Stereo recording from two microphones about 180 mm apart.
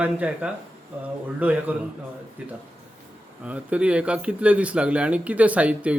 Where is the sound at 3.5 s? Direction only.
10° right (ahead or behind).